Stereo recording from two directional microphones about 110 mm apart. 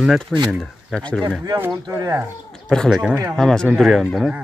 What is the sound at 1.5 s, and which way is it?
Speech, 20° right (ahead or behind).